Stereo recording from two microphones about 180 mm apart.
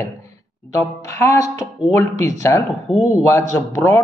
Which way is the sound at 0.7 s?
15° left (ahead or behind).